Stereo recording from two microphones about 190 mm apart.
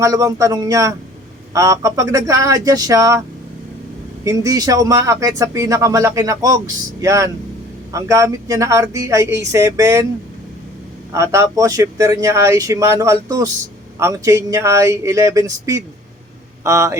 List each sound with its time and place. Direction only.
0.0 s speech: 15° right (ahead or behind)
11.1 s speech: 15° right (ahead or behind)